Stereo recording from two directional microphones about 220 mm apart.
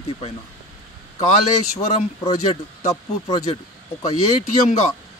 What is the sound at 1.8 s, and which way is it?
Speech, 30° left (ahead or behind).